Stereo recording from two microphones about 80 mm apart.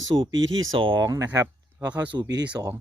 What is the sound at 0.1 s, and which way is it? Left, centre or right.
Speech, right.